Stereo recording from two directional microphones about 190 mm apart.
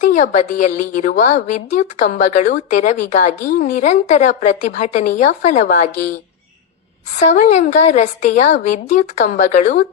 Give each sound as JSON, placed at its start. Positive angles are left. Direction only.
{"t": 0.0, "sound": "a woman's voice", "side_deg": 40}
{"t": 7.2, "sound": "a woman's voice", "side_deg": 40}